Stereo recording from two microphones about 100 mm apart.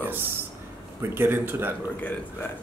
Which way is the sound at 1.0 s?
20° right (ahead or behind).